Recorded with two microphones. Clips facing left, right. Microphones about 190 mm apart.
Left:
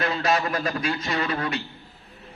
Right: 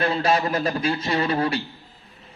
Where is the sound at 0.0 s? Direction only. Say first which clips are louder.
Right 3 dB; 30° right (ahead or behind).